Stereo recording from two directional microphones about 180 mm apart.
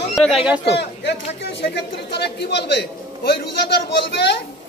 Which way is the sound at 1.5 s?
70° left (ahead or behind).